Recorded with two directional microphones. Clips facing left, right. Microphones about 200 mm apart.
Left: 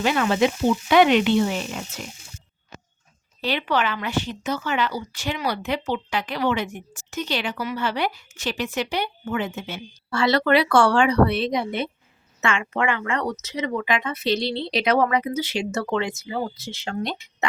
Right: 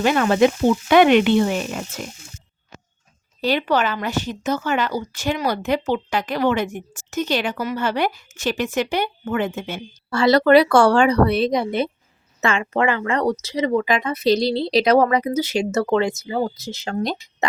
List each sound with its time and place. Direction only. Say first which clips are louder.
0.0 s speech: right 4 dB; 50° right (ahead or behind)
3.4 s speech: right 4 dB; 40° right (ahead or behind)